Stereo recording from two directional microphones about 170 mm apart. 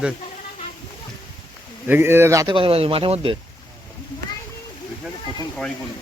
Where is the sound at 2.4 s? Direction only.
30° right (ahead or behind).